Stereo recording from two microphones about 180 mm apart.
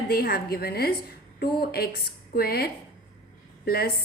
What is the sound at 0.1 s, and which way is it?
Speech, 60° left (ahead or behind).